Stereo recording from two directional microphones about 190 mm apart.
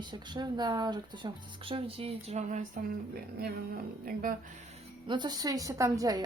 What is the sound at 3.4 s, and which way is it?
Speech, 50° right (ahead or behind).